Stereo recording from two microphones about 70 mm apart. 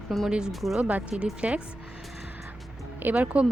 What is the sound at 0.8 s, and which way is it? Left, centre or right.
Speech, centre.